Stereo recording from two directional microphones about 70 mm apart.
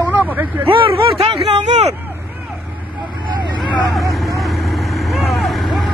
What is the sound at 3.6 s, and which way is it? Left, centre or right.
Vehicle, centre.